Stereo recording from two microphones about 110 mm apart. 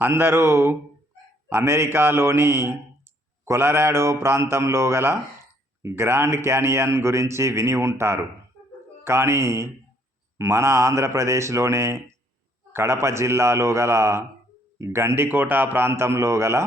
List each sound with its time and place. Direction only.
0.0 s speech: 20° right (ahead or behind)